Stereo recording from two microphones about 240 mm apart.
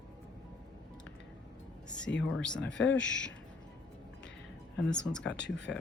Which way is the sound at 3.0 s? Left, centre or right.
Left.